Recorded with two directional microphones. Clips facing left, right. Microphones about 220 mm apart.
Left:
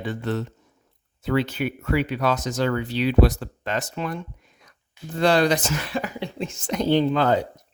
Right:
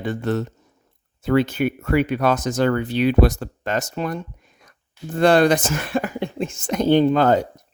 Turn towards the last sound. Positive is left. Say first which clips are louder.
# right 4 dB
turn(degrees=-45)  # may be behind; listen again after turning